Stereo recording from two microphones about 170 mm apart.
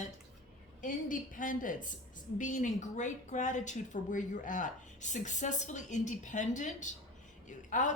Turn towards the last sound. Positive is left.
turn(degrees=50)  # may be behind; listen again after turning